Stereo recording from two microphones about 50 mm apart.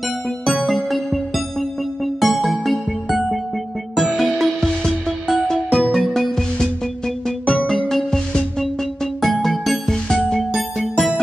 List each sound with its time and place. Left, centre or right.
0.5 s music: centre
4.2 s music: centre
7.2 s music: centre